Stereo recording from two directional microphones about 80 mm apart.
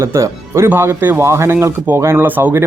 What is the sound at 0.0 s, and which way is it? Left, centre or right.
Speech, right.